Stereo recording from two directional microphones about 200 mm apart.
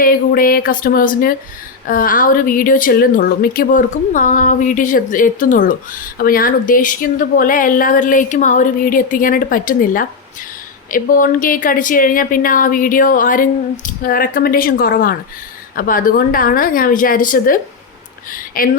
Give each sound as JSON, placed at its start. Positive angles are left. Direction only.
{"t": 0.0, "sound": "a woman's voice", "side_deg": 45}